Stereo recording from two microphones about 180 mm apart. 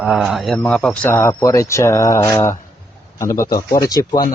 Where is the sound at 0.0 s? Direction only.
Centre (ahead or behind); by 4.2 s 20° left (ahead or behind).